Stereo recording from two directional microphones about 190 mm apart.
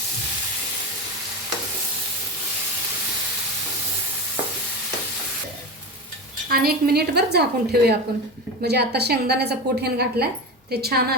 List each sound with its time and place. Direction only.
6.5 s a woman's voice: 50° right (ahead or behind)